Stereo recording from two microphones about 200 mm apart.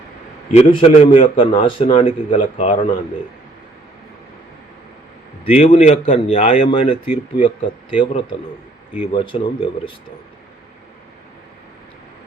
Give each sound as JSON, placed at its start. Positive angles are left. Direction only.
{"t": 0.5, "sound": "a man's voice", "side_deg": 35}
{"t": 5.5, "sound": "a man's voice", "side_deg": 30}